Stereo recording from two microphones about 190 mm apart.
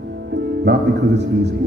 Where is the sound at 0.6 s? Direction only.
60° right (ahead or behind).